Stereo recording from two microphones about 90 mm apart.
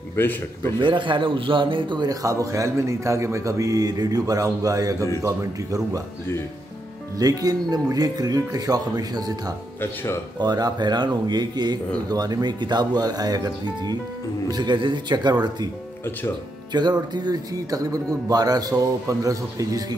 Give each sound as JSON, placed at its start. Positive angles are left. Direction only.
{"t": 0.1, "sound": "a man's voice", "side_deg": 25}
{"t": 0.7, "sound": "a man's voice", "side_deg": -65}
{"t": 2.0, "sound": "a man's voice", "side_deg": -40}
{"t": 7.2, "sound": "speech", "side_deg": -45}
{"t": 10.4, "sound": "speech", "side_deg": -50}
{"t": 16.7, "sound": "speech", "side_deg": -50}